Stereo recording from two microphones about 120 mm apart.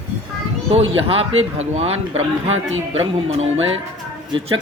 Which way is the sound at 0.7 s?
50° right (ahead or behind).